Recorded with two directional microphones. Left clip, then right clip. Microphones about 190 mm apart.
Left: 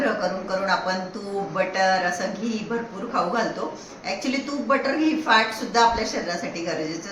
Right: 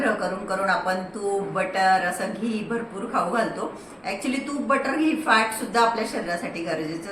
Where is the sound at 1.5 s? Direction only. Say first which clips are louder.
Even; 10° right (ahead or behind).